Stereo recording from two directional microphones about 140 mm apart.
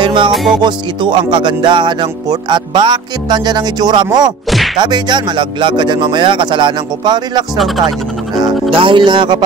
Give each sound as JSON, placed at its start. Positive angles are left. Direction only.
{"t": 0.0, "sound": "music", "side_deg": -35}
{"t": 0.3, "sound": "music", "side_deg": 0}
{"t": 0.6, "sound": "speech", "side_deg": -35}
{"t": 7.5, "sound": "music", "side_deg": 0}
{"t": 8.6, "sound": "speech", "side_deg": -40}